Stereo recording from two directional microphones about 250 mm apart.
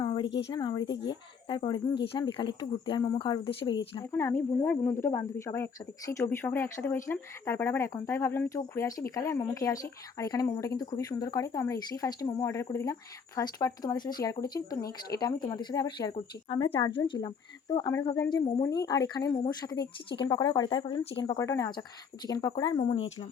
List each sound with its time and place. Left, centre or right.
0.0 s a sound: centre
0.3 s speech: left
0.5 s speech: centre